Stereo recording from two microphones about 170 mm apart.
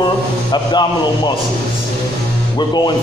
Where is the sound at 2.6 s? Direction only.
30° left (ahead or behind).